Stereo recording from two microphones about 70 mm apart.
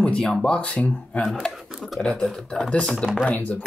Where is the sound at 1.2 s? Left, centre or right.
Centre.